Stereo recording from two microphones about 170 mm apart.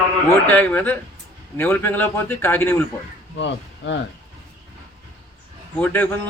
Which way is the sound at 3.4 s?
90° left.